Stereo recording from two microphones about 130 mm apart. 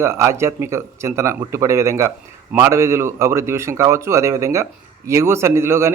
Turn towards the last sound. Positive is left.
turn(degrees=-20)  # may be behind; listen again after turning